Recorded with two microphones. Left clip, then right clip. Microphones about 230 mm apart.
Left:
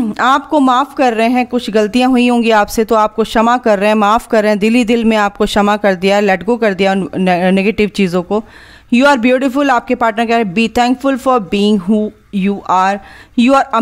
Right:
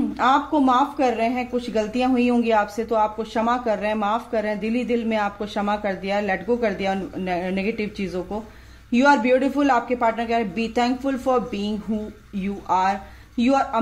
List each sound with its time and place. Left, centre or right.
0.2 s a woman's voice: left